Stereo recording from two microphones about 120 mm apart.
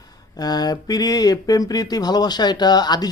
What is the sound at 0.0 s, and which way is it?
Speech, 30° left (ahead or behind).